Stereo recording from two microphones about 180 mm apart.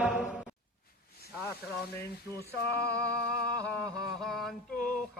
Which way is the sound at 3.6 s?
15° right (ahead or behind).